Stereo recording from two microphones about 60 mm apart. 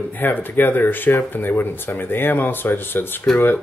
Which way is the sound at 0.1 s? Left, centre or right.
Left.